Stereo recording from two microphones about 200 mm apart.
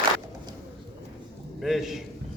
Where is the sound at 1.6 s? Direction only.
Centre (ahead or behind).